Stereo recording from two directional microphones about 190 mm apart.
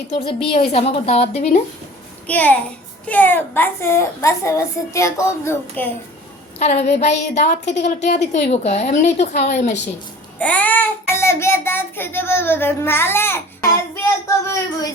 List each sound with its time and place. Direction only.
0.4 s a woman's voice: 30° left (ahead or behind)
2.2 s a child's voice: 10° left (ahead or behind)
6.6 s a woman's voice: 35° left (ahead or behind)
10.3 s a child's voice: 5° left (ahead or behind)